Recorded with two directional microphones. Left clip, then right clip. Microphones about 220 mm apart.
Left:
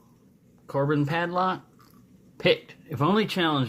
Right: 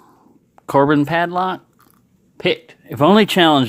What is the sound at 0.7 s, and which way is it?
Speech, 45° right (ahead or behind).